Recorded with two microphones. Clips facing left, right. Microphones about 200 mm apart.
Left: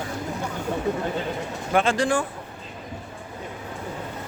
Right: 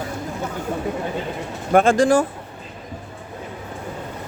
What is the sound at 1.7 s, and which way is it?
Speech, 45° right (ahead or behind).